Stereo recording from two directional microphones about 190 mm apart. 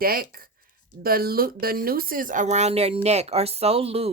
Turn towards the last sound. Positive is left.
turn(degrees=-30)  # may be behind; listen again after turning